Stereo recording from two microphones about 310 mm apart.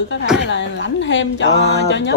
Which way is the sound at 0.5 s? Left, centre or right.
Left.